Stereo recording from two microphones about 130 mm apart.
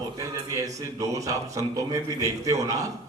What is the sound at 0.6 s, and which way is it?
A man's voice, 25° right (ahead or behind).